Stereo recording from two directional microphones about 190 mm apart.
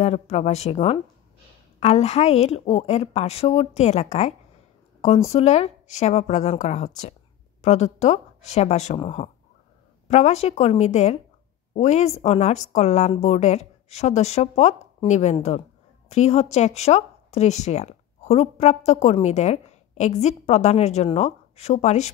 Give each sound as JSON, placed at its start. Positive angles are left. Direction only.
{"t": 0.0, "sound": "speech", "side_deg": 35}